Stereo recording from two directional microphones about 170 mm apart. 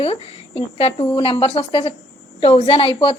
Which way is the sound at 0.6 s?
35° left (ahead or behind).